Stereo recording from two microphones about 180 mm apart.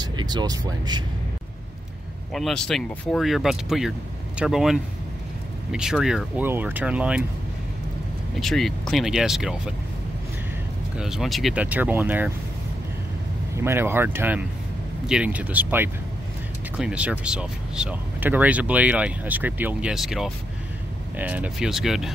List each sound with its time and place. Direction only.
0.0 s speech: 25° right (ahead or behind)
2.3 s speech: centre (ahead or behind)
8.4 s speech: centre (ahead or behind)
11.0 s speech: 5° right (ahead or behind)
13.6 s speech: 15° right (ahead or behind)